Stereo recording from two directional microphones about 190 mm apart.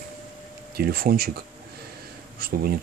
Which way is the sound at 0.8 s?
55° right (ahead or behind).